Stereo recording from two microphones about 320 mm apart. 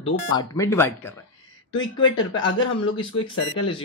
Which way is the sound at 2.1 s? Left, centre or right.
Left.